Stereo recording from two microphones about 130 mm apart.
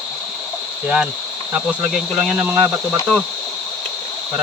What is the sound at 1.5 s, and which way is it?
Speech, 5° right (ahead or behind).